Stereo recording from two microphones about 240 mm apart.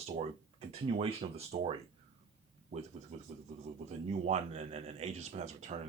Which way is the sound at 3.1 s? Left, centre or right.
Right.